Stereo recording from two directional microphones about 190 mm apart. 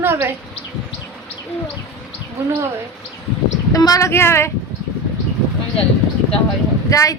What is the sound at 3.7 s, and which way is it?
Speech, 20° left (ahead or behind).